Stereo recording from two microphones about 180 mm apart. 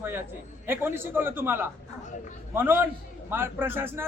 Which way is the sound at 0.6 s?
10° right (ahead or behind).